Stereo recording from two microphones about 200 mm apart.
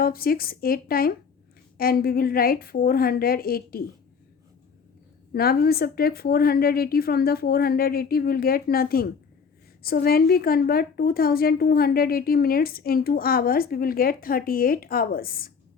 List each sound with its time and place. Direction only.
0.0 s a woman's voice: 50° left (ahead or behind)
5.3 s a woman's voice: 50° left (ahead or behind)